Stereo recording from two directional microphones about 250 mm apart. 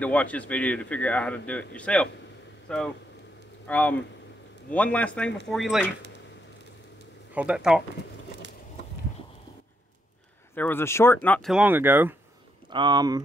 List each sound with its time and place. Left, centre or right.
0.0 s a man's voice: centre
7.3 s a man's voice: centre
10.5 s a man's voice: centre